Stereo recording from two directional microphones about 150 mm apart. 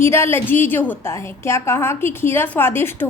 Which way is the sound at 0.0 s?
15° left (ahead or behind).